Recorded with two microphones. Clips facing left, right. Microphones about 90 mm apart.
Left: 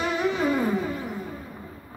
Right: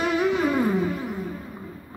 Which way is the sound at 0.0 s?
10° right (ahead or behind).